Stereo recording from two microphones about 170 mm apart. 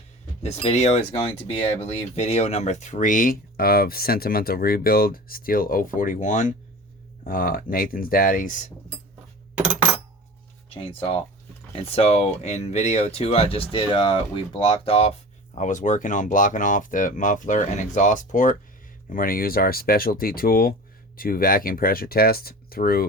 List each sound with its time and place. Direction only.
0.4 s speech: 40° left (ahead or behind)
11.7 s speech: 35° left (ahead or behind)
15.5 s speech: 45° left (ahead or behind)